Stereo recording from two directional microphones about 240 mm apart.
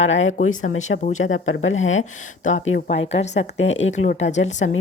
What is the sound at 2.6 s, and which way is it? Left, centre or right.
Speech, left.